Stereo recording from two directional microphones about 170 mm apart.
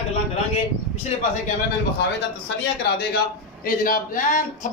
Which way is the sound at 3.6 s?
55° left (ahead or behind).